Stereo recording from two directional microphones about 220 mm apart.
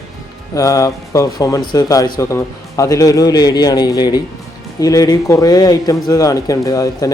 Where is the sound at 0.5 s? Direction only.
15° left (ahead or behind).